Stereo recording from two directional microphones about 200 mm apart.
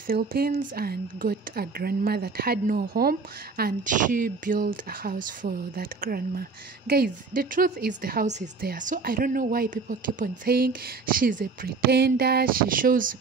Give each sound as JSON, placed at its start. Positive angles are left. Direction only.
{"t": 0.0, "sound": "a woman's voice", "side_deg": -50}